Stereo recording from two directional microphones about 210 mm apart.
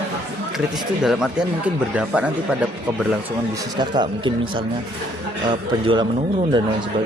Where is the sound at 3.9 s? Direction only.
20° right (ahead or behind).